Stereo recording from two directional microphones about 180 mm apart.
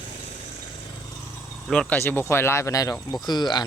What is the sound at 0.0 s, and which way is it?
Vehicle, 40° left (ahead or behind).